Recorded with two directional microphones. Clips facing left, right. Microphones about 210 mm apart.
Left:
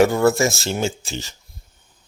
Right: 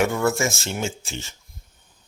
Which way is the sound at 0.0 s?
35° left (ahead or behind).